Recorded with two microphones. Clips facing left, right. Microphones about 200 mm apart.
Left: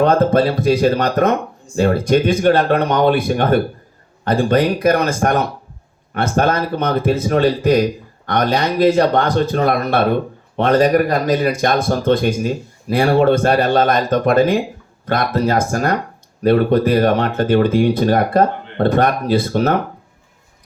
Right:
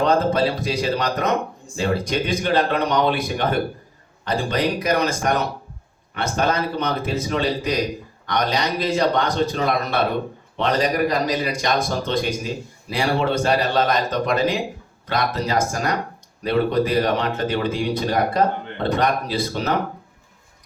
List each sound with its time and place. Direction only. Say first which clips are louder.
0.0 s speech: left 5 dB; 55° left (ahead or behind)